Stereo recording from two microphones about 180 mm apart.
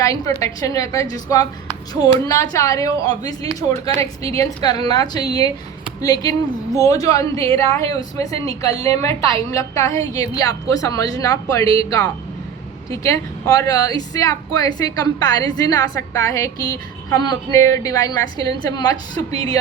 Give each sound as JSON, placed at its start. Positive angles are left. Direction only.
{"t": 0.0, "sound": "a woman's voice", "side_deg": 20}